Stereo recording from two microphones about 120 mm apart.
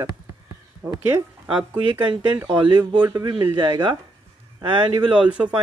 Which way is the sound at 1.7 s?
40° right (ahead or behind).